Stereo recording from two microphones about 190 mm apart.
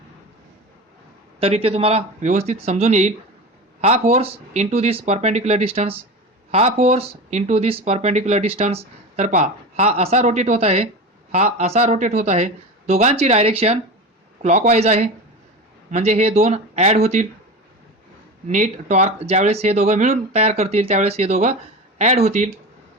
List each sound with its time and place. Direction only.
1.4 s speech: 30° right (ahead or behind)
18.4 s speech: 40° right (ahead or behind)